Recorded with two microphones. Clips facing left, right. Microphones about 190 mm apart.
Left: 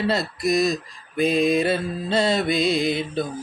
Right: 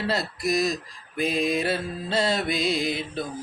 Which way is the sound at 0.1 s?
5° right (ahead or behind).